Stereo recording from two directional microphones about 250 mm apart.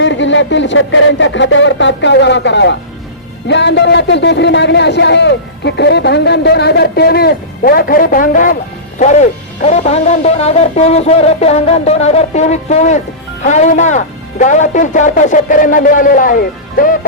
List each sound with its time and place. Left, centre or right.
0.0 s a man's voice: left